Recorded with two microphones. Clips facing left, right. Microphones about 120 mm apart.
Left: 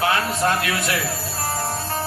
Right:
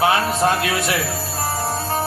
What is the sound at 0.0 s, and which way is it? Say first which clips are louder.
Speech: right 3 dB; 20° right (ahead or behind).